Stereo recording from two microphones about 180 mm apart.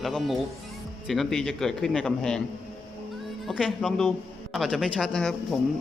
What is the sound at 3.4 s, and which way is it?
Speech, centre (ahead or behind).